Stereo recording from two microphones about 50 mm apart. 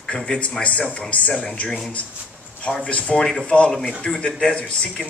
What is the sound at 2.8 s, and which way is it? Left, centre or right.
Speech, left.